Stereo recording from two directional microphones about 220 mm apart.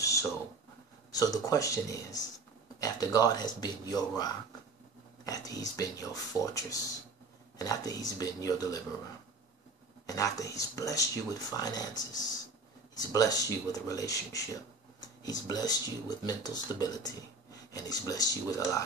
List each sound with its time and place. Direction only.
1.1 s speech: 15° left (ahead or behind)
5.2 s speech: 15° left (ahead or behind)
10.0 s speech: 15° left (ahead or behind)